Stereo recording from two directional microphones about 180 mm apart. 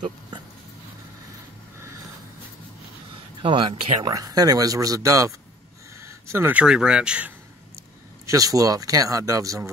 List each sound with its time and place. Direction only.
3.4 s speech: 25° right (ahead or behind); by 7.3 s 5° right (ahead or behind)
8.3 s speech: 20° right (ahead or behind)